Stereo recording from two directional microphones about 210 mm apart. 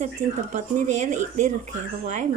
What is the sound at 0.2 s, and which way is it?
Speech, 35° right (ahead or behind).